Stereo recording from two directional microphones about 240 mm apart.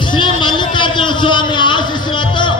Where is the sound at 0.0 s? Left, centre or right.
Centre.